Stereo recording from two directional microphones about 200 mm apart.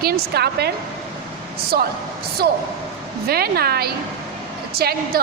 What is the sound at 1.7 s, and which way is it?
Speech, 50° right (ahead or behind).